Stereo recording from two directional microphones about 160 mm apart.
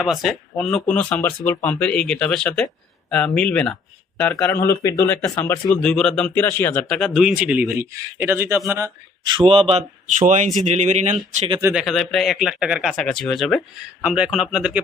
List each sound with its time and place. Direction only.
0.0 s a man's voice: centre (ahead or behind); by 5.8 s 15° left (ahead or behind)
5.8 s a man's voice: 5° left (ahead or behind); by 8.9 s 15° right (ahead or behind)
9.2 s a man's voice: 30° right (ahead or behind)
10.2 s speech: 50° right (ahead or behind)
11.7 s a man's voice: centre (ahead or behind)